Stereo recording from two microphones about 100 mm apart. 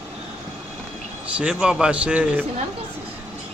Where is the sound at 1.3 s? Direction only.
10° right (ahead or behind).